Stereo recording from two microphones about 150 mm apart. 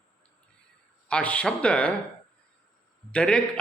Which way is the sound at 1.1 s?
10° left (ahead or behind).